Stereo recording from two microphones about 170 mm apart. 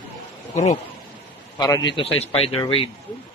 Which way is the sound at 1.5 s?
20° left (ahead or behind).